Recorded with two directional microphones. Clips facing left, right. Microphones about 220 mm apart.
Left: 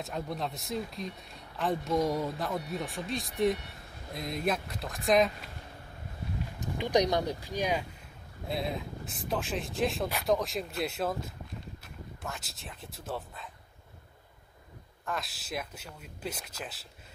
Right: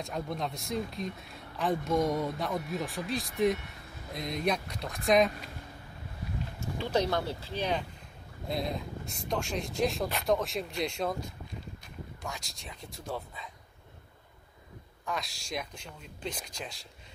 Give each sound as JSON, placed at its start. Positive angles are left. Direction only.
{"t": 0.0, "sound": "speech", "side_deg": 0}
{"t": 6.6, "sound": "speech", "side_deg": 15}
{"t": 8.5, "sound": "speech", "side_deg": 0}
{"t": 15.0, "sound": "speech", "side_deg": 0}